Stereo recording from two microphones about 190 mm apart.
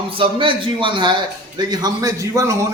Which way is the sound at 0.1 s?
25° right (ahead or behind).